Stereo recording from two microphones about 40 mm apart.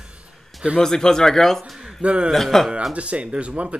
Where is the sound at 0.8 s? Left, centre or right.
Centre.